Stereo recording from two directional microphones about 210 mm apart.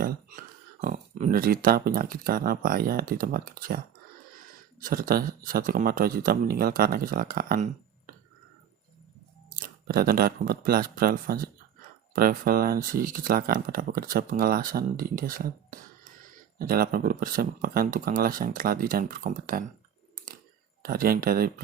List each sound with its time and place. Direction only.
0.0 s speech: 40° right (ahead or behind)
4.8 s speech: 40° right (ahead or behind)
9.6 s speech: 45° right (ahead or behind)
20.8 s speech: 45° right (ahead or behind)